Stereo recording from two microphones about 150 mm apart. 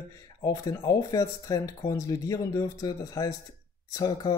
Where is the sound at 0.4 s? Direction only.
25° left (ahead or behind).